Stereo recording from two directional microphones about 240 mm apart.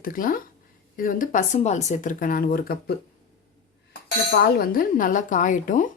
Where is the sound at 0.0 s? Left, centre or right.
Left.